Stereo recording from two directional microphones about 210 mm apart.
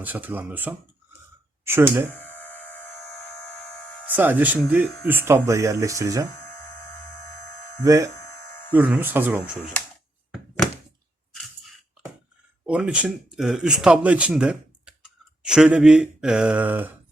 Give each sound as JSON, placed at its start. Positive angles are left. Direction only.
{"t": 0.0, "sound": "speech", "side_deg": -10}
{"t": 2.1, "sound": "a sound", "side_deg": 10}
{"t": 3.4, "sound": "buzzer", "side_deg": 5}
{"t": 4.0, "sound": "speech", "side_deg": -10}
{"t": 7.9, "sound": "speech", "side_deg": -15}
{"t": 10.3, "sound": "thunk", "side_deg": 0}
{"t": 12.6, "sound": "speech", "side_deg": -5}